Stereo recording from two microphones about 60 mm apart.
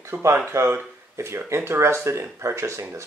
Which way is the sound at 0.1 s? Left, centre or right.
Right.